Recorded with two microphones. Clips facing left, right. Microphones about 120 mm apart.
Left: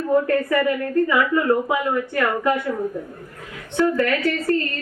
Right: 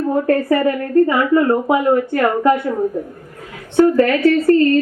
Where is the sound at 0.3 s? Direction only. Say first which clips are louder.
Right 4 dB; 40° right (ahead or behind).